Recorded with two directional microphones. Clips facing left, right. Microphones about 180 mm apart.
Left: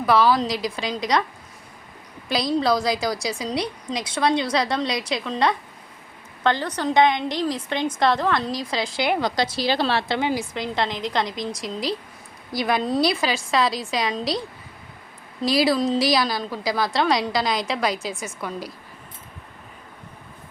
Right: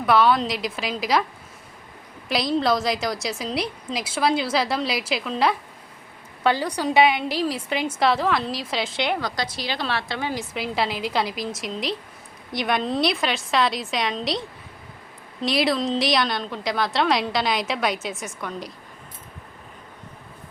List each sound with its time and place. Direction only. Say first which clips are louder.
0.0 s a woman's voice: even; centre (ahead or behind)
2.3 s a woman's voice: left 1 dB; centre (ahead or behind)
9.2 s a woman's voice: left 6 dB; 25° left (ahead or behind)
10.5 s a woman's voice: even; 5° right (ahead or behind)